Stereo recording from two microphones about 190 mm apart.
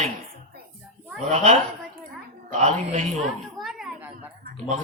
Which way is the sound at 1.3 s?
35° right (ahead or behind).